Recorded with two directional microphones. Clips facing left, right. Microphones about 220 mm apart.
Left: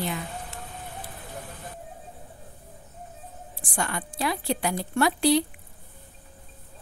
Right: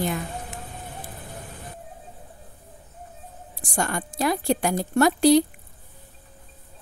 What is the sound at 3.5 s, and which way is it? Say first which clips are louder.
Speech: right 4 dB; 40° right (ahead or behind).